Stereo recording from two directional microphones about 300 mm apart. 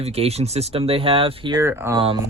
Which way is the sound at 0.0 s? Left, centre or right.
Centre.